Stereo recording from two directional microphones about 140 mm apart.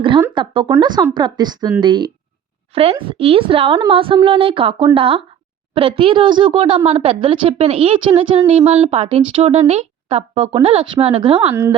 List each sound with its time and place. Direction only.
0.3 s speech: 35° right (ahead or behind)
2.7 s speech: 40° right (ahead or behind)